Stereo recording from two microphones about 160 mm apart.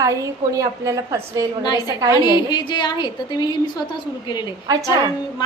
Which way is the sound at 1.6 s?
25° left (ahead or behind).